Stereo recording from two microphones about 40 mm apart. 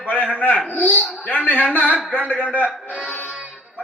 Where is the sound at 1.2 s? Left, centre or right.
Left.